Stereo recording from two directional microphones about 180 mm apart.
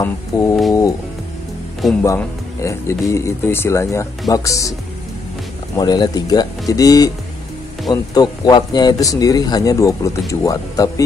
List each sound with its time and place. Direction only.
0.0 s speech: 15° left (ahead or behind)
2.0 s speech: 15° left (ahead or behind)
5.8 s speech: 20° left (ahead or behind)